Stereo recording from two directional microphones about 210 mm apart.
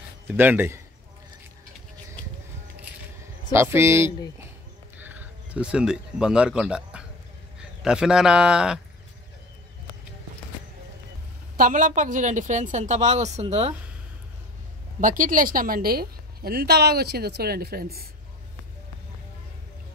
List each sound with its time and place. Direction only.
0.3 s speech: 10° right (ahead or behind)
3.5 s speech: 10° right (ahead or behind)
4.9 s a sound: 10° right (ahead or behind)
7.5 s a man's voice: 5° right (ahead or behind)
11.5 s a woman's voice: 40° right (ahead or behind)
15.0 s a woman's voice: 40° right (ahead or behind)